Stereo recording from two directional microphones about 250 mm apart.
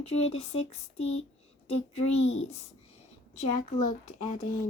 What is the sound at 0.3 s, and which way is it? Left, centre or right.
Speech, left.